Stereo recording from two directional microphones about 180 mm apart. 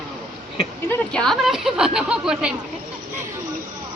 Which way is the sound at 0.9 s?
5° left (ahead or behind).